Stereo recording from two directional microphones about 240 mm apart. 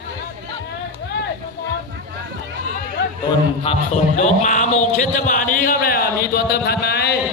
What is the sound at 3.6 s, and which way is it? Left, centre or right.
A man's voice, left.